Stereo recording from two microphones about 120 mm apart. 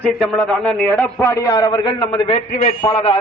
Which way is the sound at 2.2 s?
75° left (ahead or behind).